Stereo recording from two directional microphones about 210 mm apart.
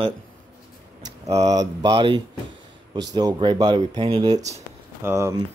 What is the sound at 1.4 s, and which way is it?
Speech, 15° right (ahead or behind).